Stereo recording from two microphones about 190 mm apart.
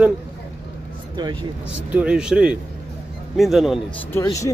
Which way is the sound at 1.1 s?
25° right (ahead or behind).